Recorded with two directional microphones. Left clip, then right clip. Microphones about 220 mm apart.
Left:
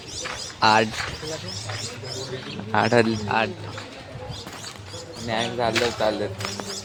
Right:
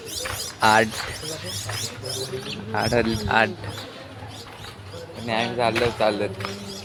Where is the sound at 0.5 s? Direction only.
5° left (ahead or behind).